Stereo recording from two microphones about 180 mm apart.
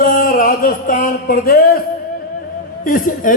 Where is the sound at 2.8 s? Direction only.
50° left (ahead or behind).